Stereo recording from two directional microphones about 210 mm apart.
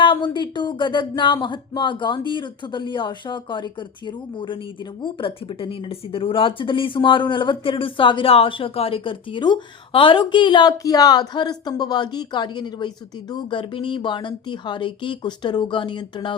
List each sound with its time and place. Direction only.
0.0 s speech: 20° left (ahead or behind)